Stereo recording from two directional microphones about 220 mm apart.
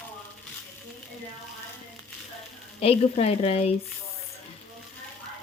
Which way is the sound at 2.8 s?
25° left (ahead or behind).